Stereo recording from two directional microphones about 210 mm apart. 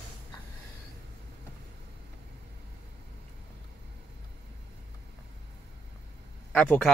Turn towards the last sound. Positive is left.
turn(degrees=5)  # may be behind; listen again after turning